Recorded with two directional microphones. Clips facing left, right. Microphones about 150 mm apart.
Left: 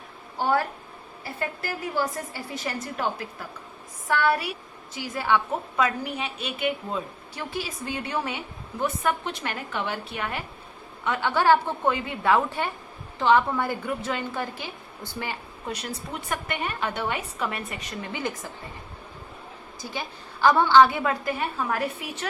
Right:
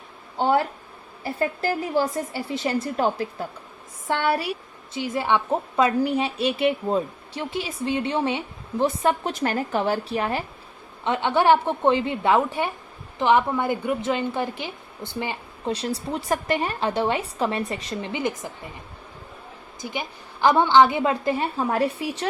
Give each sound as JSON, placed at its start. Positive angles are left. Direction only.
{"t": 0.3, "sound": "a woman's voice", "side_deg": -20}
{"t": 1.4, "sound": "a woman's voice", "side_deg": -35}
{"t": 7.5, "sound": "a woman's voice", "side_deg": -20}
{"t": 11.0, "sound": "a woman's voice", "side_deg": -20}
{"t": 19.8, "sound": "a woman's voice", "side_deg": -20}